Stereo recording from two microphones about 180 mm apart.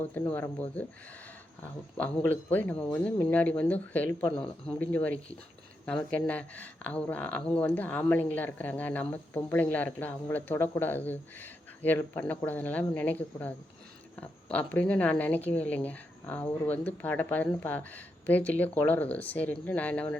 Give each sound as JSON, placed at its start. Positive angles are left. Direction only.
{"t": 0.1, "sound": "speech", "side_deg": 10}